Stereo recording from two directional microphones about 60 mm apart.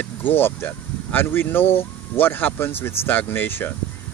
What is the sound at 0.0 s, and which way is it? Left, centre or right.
Speech, left.